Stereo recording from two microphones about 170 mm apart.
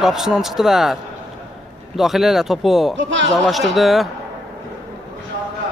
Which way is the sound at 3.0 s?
90° right.